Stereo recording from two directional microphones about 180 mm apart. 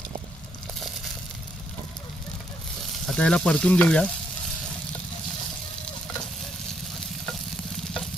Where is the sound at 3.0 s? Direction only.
5° left (ahead or behind).